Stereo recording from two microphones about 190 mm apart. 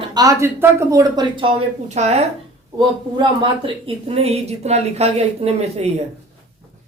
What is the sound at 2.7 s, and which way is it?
A woman's voice, 25° right (ahead or behind).